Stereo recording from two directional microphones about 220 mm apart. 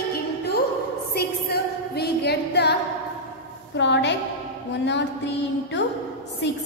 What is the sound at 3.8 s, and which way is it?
A woman's voice, 55° left (ahead or behind).